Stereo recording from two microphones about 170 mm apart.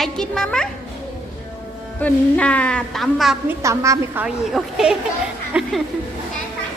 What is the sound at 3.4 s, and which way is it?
Speech, 15° right (ahead or behind).